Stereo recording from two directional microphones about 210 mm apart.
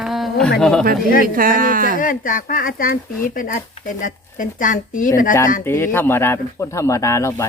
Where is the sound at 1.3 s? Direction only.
40° right (ahead or behind).